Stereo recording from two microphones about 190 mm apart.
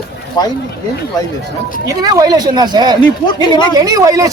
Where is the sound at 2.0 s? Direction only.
20° right (ahead or behind).